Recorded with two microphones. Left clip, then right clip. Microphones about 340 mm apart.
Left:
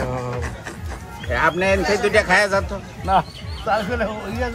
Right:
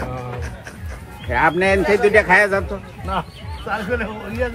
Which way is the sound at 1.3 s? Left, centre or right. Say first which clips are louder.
Right 2 dB; centre.